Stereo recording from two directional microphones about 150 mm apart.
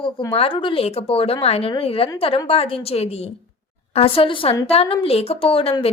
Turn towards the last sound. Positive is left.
turn(degrees=40)  # may be behind; listen again after turning